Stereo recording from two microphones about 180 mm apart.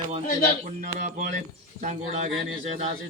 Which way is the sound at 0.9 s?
45° right (ahead or behind).